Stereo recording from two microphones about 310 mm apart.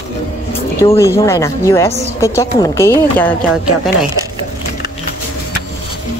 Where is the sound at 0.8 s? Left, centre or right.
Centre.